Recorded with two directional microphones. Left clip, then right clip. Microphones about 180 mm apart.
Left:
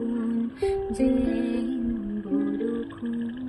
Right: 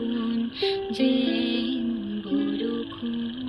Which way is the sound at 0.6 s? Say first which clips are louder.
Even; 25° left (ahead or behind).